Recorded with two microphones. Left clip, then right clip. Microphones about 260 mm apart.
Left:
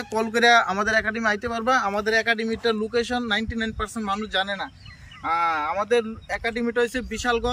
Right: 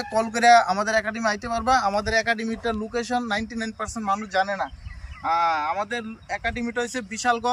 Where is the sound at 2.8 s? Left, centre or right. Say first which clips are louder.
Left 2 dB; centre.